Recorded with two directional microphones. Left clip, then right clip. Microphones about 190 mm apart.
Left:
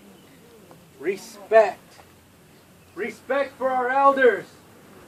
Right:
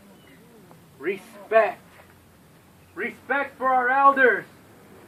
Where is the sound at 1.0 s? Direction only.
15° left (ahead or behind).